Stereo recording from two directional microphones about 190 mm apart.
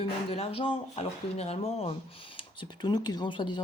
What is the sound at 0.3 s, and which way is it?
Speech, 30° left (ahead or behind).